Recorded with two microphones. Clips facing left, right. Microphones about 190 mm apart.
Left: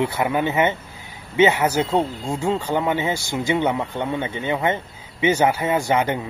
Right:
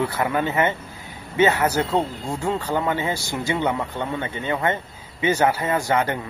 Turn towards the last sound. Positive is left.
turn(degrees=20)  # may be behind; listen again after turning